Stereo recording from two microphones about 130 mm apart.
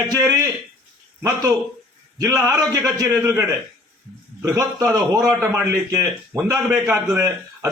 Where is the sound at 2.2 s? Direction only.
25° right (ahead or behind).